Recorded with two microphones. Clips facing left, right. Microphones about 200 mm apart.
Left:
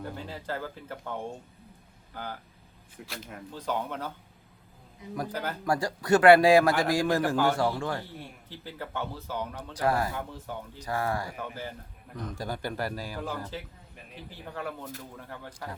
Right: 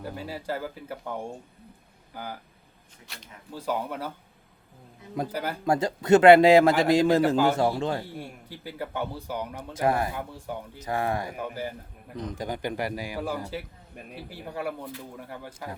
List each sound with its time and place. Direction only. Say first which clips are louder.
0.0 s speech: right 3 dB; 10° right (ahead or behind)
3.0 s speech: left 8 dB; 60° left (ahead or behind)
3.5 s speech: right 2 dB; 10° right (ahead or behind)
5.3 s speech: right 2 dB; 10° right (ahead or behind)
5.6 s a man's voice: right 4 dB; 20° right (ahead or behind)
7.2 s speech: right 4 dB; 10° right (ahead or behind)
7.5 s a man's voice: right 3 dB; 20° right (ahead or behind)
8.0 s a man's voice: right 5 dB; 10° right (ahead or behind)
10.8 s a man's voice: right 2 dB; 20° right (ahead or behind)